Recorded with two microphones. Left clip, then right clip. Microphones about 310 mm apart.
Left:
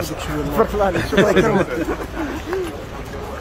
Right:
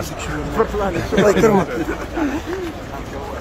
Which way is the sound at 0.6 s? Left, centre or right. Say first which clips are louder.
Left 2 dB; left.